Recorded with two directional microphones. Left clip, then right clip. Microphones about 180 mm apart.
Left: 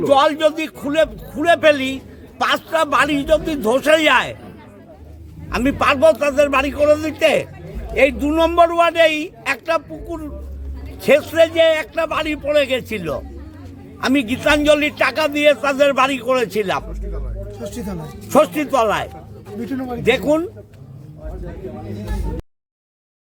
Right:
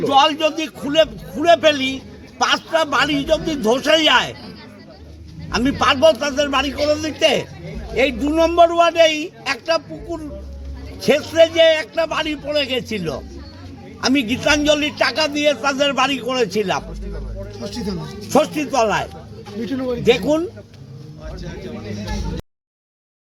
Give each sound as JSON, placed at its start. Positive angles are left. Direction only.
{"t": 0.0, "sound": "a man's voice", "side_deg": 25}
{"t": 5.5, "sound": "a man's voice", "side_deg": 20}
{"t": 14.3, "sound": "a man's voice", "side_deg": 15}
{"t": 18.3, "sound": "a man's voice", "side_deg": 20}
{"t": 19.6, "sound": "speech", "side_deg": 80}
{"t": 20.1, "sound": "a man's voice", "side_deg": 15}